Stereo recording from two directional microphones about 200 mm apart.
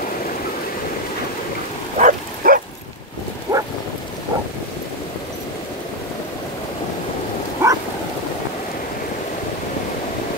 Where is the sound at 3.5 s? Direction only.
20° right (ahead or behind).